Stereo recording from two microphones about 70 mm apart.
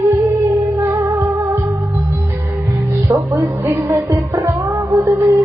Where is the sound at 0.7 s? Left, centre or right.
Right.